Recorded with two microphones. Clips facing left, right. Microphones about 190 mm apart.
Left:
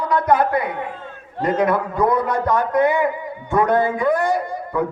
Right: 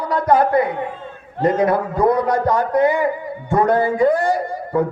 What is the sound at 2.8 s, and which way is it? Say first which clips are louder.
Speech: right 1 dB; 60° left (ahead or behind).